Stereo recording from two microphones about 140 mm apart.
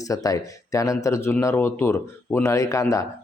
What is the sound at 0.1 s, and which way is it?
Speech, 25° left (ahead or behind).